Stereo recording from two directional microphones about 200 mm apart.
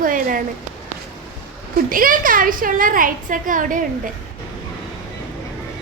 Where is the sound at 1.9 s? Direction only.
45° right (ahead or behind).